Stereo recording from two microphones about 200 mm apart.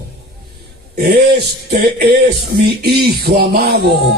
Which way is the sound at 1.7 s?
50° right (ahead or behind).